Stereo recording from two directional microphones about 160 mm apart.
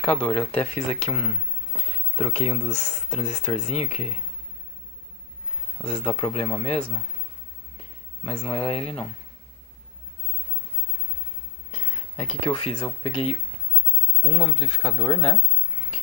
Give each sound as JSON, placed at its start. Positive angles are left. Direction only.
{"t": 0.3, "sound": "speech", "side_deg": 5}
{"t": 0.7, "sound": "speech", "side_deg": 35}
{"t": 2.6, "sound": "speech", "side_deg": 5}
{"t": 2.9, "sound": "speech", "side_deg": 35}
{"t": 5.8, "sound": "speech", "side_deg": 30}
{"t": 8.2, "sound": "speech", "side_deg": 35}
{"t": 12.2, "sound": "speech", "side_deg": 35}